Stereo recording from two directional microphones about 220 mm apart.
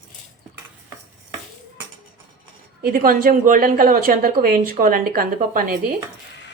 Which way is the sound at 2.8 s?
40° right (ahead or behind).